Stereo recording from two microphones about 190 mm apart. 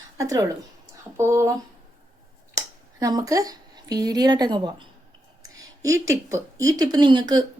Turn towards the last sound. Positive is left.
turn(degrees=-20)  # may be behind; listen again after turning